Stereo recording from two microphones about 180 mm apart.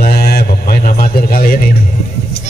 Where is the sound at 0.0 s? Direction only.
60° left (ahead or behind).